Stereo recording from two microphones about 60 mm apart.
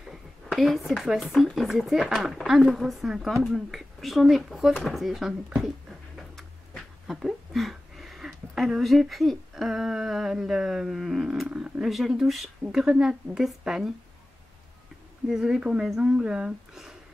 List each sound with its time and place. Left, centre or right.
0.1 s a sound: centre
1.3 s speech: centre
15.2 s speech: centre